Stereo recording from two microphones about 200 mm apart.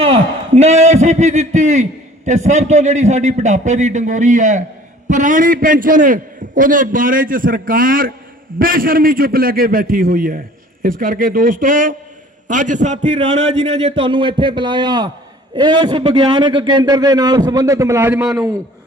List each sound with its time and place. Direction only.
0.0 s a man's voice: 30° right (ahead or behind); by 18.3 s 5° right (ahead or behind)